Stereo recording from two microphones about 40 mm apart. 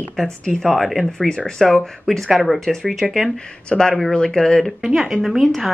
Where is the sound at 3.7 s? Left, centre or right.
Centre.